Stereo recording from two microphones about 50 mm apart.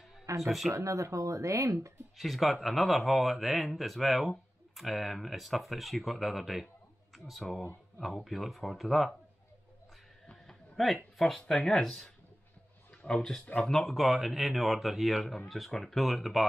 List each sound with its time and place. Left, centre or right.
0.4 s speech: centre
0.7 s speech: right
2.1 s speech: centre
10.3 s a sound: centre
11.1 s speech: centre
13.9 s speech: centre